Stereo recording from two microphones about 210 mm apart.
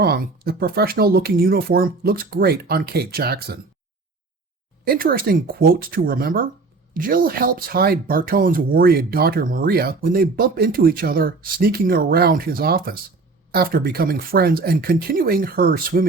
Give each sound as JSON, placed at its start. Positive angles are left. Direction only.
{"t": 0.0, "sound": "speech", "side_deg": -50}
{"t": 4.9, "sound": "speech", "side_deg": -45}